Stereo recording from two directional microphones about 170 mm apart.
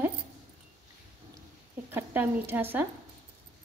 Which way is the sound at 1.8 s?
10° right (ahead or behind).